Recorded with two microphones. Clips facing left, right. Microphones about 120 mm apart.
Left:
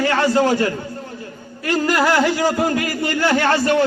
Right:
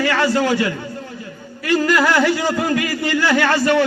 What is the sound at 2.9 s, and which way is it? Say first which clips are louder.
Speech: right 1 dB; 50° left (ahead or behind).